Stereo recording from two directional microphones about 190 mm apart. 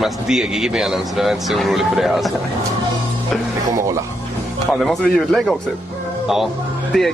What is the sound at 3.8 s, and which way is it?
Speech, 15° right (ahead or behind).